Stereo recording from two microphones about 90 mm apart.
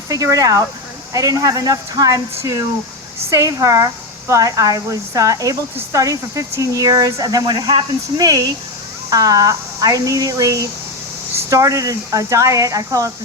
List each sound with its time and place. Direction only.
0.1 s speech: 40° right (ahead or behind)
9.0 s speech: 40° right (ahead or behind)